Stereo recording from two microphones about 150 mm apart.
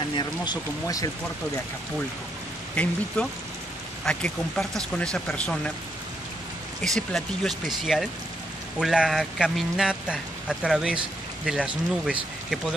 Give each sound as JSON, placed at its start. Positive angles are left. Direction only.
{"t": 0.1, "sound": "speech", "side_deg": 30}
{"t": 2.7, "sound": "speech", "side_deg": 10}
{"t": 6.8, "sound": "speech", "side_deg": 5}